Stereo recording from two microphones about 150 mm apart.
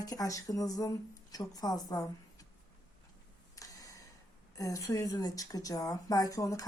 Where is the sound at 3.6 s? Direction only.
25° left (ahead or behind).